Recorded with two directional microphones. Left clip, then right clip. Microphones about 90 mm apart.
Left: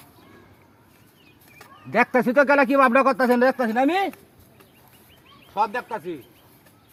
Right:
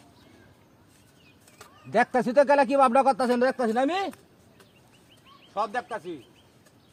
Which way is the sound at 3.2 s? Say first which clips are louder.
Left 5 dB; 35° right (ahead or behind).